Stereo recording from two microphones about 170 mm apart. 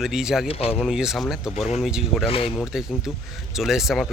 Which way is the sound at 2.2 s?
35° left (ahead or behind).